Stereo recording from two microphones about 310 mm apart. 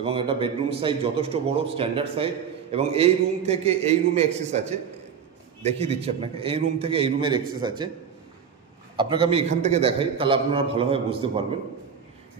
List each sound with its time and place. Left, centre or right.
0.0 s a man's voice: centre
8.9 s a man's voice: centre